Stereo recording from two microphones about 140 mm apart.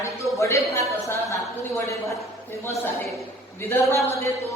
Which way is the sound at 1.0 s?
20° left (ahead or behind).